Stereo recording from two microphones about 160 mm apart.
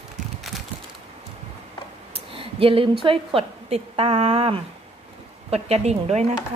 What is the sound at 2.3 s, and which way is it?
A woman's voice, 35° right (ahead or behind).